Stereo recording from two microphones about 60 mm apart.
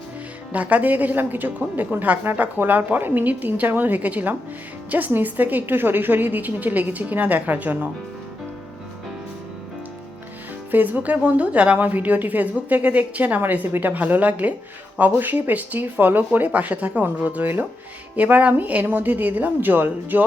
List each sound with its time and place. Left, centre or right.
0.5 s a woman's voice: right
10.7 s a woman's voice: right